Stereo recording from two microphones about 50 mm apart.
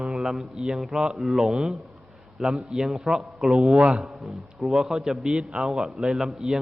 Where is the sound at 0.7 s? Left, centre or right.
Centre.